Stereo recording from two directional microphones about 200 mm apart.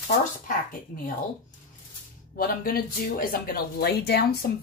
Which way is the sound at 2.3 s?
45° left (ahead or behind).